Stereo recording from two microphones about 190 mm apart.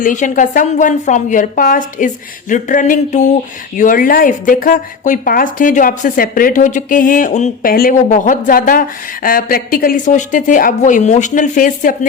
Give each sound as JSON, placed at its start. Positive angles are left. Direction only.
{"t": 0.0, "sound": "speech", "side_deg": 45}